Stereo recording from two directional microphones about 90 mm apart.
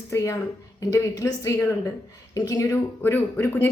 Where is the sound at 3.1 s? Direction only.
25° left (ahead or behind).